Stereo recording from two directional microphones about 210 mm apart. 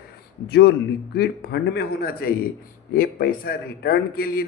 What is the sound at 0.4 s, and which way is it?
A man's voice, 50° left (ahead or behind).